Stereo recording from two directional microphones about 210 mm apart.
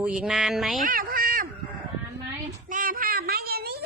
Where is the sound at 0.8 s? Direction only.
40° right (ahead or behind).